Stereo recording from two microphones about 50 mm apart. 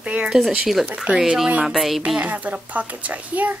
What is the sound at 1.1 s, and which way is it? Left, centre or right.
Speech, centre.